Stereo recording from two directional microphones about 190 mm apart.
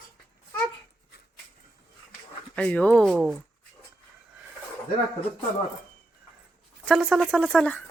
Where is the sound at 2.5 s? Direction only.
5° left (ahead or behind).